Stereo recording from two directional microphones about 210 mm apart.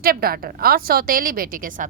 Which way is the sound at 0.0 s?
45° right (ahead or behind).